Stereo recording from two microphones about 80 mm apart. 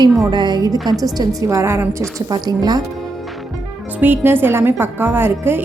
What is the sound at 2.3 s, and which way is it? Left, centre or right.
Speech, right.